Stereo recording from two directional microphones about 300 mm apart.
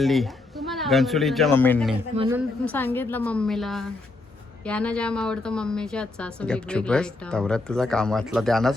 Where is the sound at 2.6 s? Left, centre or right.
Centre.